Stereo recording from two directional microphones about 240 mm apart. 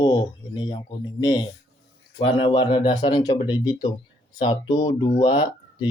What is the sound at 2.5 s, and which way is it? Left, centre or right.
Speech, left.